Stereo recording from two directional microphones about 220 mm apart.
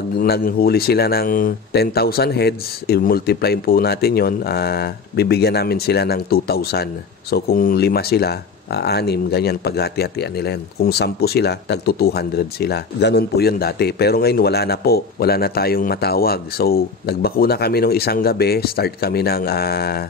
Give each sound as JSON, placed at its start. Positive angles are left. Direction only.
{"t": 0.2, "sound": "speech", "side_deg": 45}